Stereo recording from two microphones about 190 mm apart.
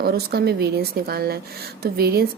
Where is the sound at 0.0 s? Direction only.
55° right (ahead or behind).